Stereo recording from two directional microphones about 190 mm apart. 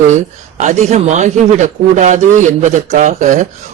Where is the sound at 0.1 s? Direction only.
40° right (ahead or behind).